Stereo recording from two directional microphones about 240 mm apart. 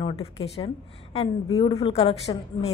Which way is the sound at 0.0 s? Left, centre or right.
Left.